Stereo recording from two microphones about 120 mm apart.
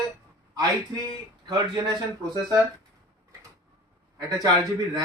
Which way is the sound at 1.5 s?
35° right (ahead or behind).